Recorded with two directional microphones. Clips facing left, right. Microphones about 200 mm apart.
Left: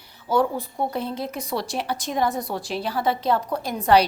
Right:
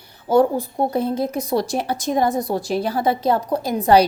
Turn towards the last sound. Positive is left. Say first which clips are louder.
# right 4 dB
turn(degrees=-40)  # may be behind; listen again after turning